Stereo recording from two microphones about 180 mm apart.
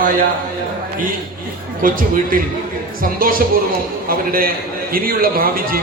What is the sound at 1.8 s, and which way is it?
A man's voice, 50° right (ahead or behind).